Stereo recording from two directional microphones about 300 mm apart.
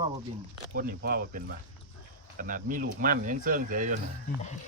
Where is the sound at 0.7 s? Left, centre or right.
Right.